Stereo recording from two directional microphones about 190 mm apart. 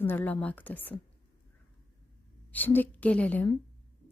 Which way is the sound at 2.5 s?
10° left (ahead or behind).